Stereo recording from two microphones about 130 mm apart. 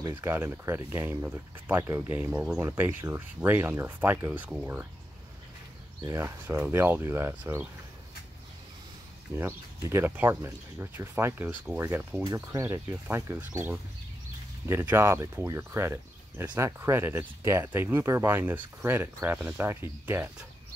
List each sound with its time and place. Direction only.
0.2 s speech: 20° right (ahead or behind)
6.0 s speech: 20° right (ahead or behind)
9.3 s speech: 20° right (ahead or behind)
12.2 s speech: 25° right (ahead or behind)